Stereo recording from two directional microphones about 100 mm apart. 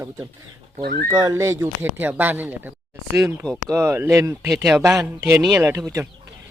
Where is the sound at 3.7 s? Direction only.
25° right (ahead or behind).